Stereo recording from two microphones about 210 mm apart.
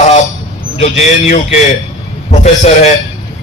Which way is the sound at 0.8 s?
30° left (ahead or behind).